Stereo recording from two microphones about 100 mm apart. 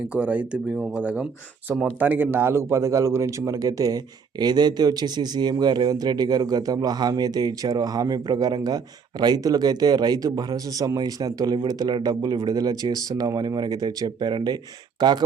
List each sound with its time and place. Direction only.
0.1 s speech: 10° right (ahead or behind); by 15.2 s 45° right (ahead or behind)